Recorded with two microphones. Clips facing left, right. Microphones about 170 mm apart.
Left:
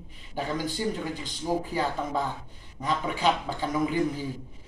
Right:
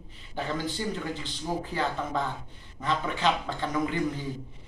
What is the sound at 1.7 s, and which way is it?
Speech, 10° left (ahead or behind).